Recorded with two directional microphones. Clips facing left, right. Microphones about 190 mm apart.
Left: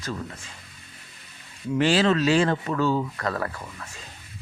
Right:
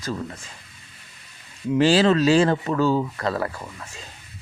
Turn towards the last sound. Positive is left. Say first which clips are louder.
# right 3 dB
turn(degrees=-25)  # may be behind; listen again after turning